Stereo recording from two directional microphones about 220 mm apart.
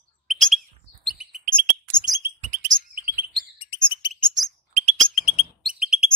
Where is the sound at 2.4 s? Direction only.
35° right (ahead or behind).